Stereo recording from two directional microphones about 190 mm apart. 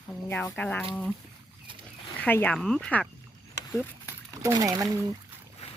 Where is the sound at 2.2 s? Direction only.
10° left (ahead or behind).